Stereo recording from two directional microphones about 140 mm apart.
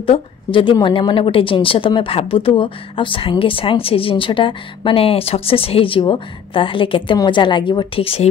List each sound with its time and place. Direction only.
0.0 s a woman's voice: 40° left (ahead or behind)